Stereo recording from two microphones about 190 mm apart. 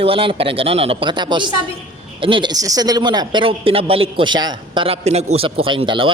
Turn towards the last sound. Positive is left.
turn(degrees=-25)  # may be behind; listen again after turning